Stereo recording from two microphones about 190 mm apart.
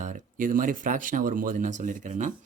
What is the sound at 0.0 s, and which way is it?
Speech, 40° right (ahead or behind).